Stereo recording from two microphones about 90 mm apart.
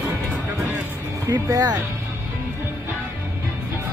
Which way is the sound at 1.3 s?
45° right (ahead or behind).